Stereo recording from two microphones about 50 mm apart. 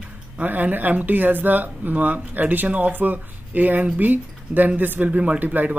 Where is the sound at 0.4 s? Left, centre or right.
Right.